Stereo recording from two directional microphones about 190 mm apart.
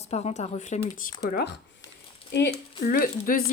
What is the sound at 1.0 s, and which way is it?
Speech, 50° left (ahead or behind).